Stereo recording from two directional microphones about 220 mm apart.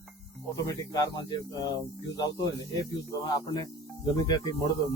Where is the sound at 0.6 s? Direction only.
15° left (ahead or behind).